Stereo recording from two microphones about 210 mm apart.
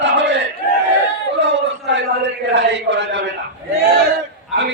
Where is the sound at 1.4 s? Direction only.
60° right (ahead or behind).